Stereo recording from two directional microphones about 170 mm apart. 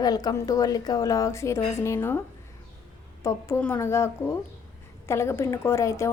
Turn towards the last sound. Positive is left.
turn(degrees=15)  # may be behind; listen again after turning